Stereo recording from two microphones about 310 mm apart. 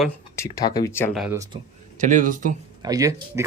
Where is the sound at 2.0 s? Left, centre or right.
Right.